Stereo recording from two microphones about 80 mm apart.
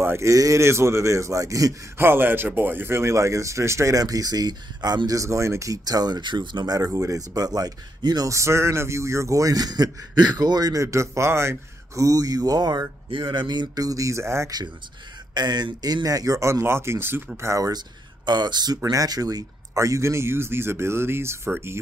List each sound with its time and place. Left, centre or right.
0.0 s speech: right
0.3 s speech: right
2.0 s speech: right
8.3 s speech: right
13.1 s speech: right
13.8 s speech: right
15.3 s speech: right
17.4 s speech: right
17.7 s speech: right
18.8 s speech: right
19.8 s speech: right